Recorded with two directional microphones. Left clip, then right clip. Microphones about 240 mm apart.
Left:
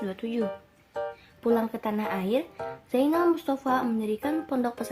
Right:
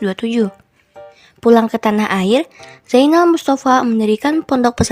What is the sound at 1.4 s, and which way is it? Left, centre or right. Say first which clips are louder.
Speech: right 14 dB; right.